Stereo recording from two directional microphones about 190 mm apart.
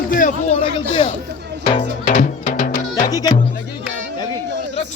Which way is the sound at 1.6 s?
35° left (ahead or behind).